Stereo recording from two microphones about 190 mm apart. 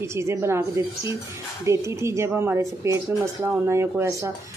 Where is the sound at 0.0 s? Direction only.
15° right (ahead or behind).